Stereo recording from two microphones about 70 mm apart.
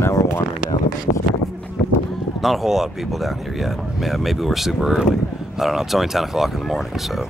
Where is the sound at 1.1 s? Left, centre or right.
Left.